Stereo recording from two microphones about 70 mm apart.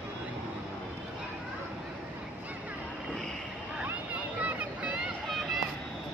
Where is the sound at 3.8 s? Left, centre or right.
Right.